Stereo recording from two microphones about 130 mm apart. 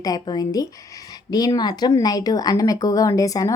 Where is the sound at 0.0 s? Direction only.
30° left (ahead or behind).